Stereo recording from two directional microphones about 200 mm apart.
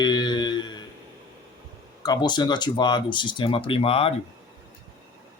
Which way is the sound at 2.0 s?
20° left (ahead or behind).